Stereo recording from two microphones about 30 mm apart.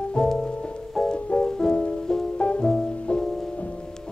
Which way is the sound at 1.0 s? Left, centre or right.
Centre.